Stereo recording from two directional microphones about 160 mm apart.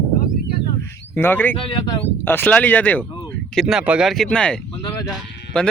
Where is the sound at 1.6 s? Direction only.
25° left (ahead or behind).